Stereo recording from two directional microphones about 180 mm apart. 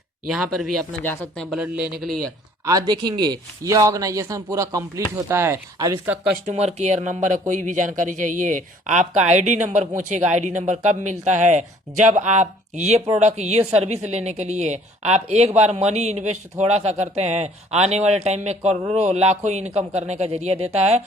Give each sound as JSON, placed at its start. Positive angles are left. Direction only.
{"t": 0.3, "sound": "speech", "side_deg": 0}
{"t": 1.0, "sound": "speech", "side_deg": 10}
{"t": 1.5, "sound": "speech", "side_deg": -5}
{"t": 2.6, "sound": "speech", "side_deg": -20}
{"t": 6.4, "sound": "speech", "side_deg": -35}